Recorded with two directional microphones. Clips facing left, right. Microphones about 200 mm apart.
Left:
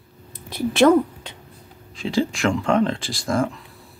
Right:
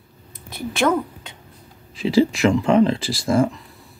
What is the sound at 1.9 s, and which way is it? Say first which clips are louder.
Speech: right 5 dB; 5° right (ahead or behind).